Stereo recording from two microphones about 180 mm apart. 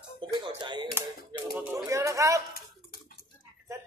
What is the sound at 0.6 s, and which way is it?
Typewriter, 25° right (ahead or behind).